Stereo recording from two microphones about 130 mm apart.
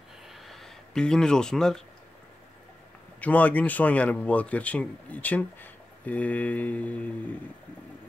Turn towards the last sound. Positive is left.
turn(degrees=10)  # may be behind; listen again after turning